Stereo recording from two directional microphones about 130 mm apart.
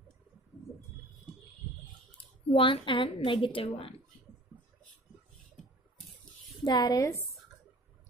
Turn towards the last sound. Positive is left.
turn(degrees=25)  # may be behind; listen again after turning